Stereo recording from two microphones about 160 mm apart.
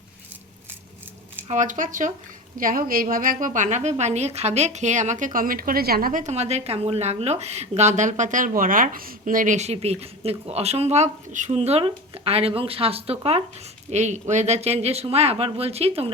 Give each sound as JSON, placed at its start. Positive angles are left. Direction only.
{"t": 1.5, "sound": "a woman's voice", "side_deg": -50}